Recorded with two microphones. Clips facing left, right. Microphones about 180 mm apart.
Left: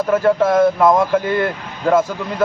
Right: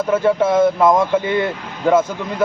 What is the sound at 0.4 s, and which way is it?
A man's voice, 20° right (ahead or behind).